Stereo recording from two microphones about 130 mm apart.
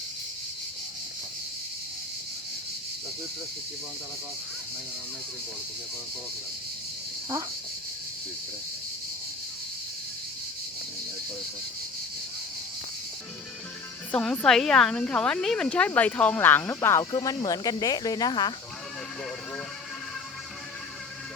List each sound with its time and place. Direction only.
14.1 s speech: 5° left (ahead or behind)
17.0 s cricket: 30° left (ahead or behind)